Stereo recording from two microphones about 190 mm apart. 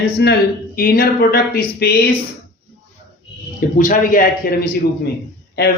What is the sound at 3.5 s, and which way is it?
Speech, 45° left (ahead or behind).